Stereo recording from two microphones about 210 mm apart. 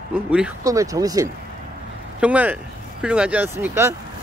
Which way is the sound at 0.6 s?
15° right (ahead or behind).